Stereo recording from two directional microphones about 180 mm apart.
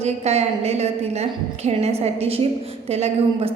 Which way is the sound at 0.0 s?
35° right (ahead or behind).